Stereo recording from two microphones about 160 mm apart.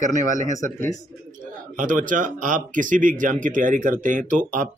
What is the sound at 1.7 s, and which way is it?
Speech, 55° right (ahead or behind).